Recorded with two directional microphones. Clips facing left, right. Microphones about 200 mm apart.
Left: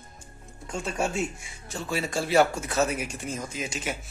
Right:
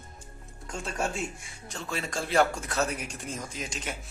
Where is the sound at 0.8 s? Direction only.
Centre (ahead or behind).